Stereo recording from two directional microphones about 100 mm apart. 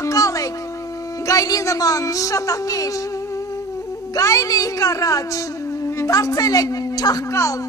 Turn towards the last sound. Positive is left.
turn(degrees=35)  # may be behind; listen again after turning